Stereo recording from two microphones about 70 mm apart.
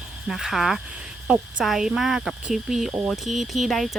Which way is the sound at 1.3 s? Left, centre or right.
Centre.